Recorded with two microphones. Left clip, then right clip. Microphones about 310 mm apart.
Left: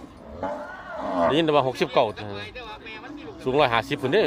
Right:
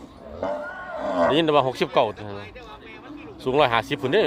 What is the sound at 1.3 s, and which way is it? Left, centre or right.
Speech, centre.